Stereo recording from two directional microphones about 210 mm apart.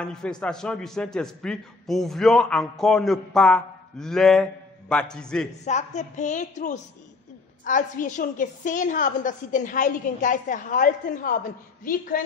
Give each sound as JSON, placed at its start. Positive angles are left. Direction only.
{"t": 0.0, "sound": "a man's voice", "side_deg": 5}
{"t": 5.7, "sound": "a woman's voice", "side_deg": 35}